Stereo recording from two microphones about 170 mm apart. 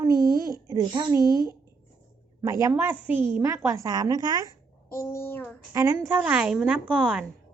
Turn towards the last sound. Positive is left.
turn(degrees=-5)  # may be behind; listen again after turning